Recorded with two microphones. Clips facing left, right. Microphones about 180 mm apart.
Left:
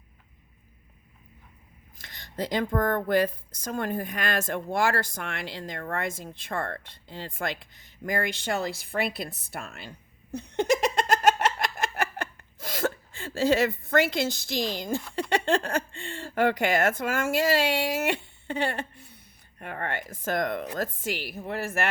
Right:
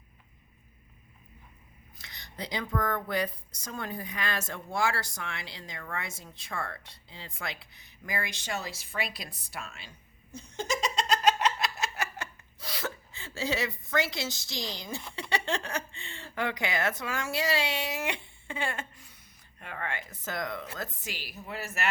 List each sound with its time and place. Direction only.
2.0 s speech: 50° left (ahead or behind)
10.3 s giggle: 65° left (ahead or behind)
15.2 s speech: 55° left (ahead or behind)
18.5 s a woman's voice: 40° left (ahead or behind); by 21.8 s 55° left (ahead or behind)